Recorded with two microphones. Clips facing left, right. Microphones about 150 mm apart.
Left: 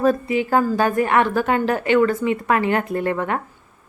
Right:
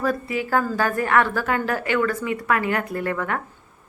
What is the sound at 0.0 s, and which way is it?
A woman's voice, 25° left (ahead or behind).